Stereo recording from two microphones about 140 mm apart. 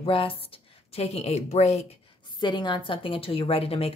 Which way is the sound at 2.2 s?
35° left (ahead or behind).